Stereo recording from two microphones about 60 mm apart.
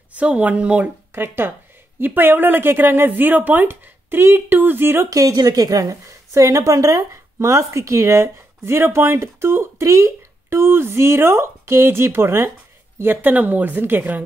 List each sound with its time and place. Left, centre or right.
0.1 s speech: right
1.1 s speech: right
3.6 s speech: right
5.1 s a woman's voice: right